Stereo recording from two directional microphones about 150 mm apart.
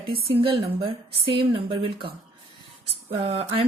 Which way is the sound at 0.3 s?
35° right (ahead or behind).